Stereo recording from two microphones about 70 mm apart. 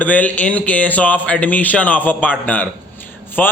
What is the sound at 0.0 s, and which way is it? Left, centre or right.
A man's voice, left.